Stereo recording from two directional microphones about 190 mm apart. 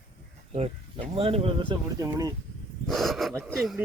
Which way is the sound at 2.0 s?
20° right (ahead or behind).